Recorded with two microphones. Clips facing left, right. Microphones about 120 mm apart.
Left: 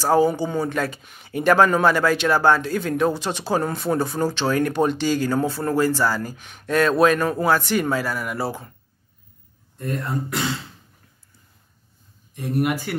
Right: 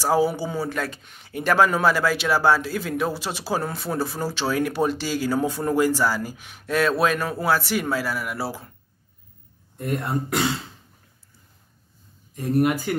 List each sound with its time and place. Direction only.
0.0 s speech: 10° right (ahead or behind)
9.9 s speech: 30° right (ahead or behind)
12.5 s speech: 5° left (ahead or behind)